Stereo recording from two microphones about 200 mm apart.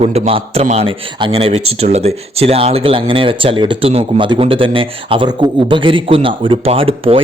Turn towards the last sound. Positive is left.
turn(degrees=-30)  # may be behind; listen again after turning